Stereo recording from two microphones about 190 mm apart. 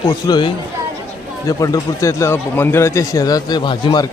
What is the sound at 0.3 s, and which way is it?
A man's voice, 25° left (ahead or behind).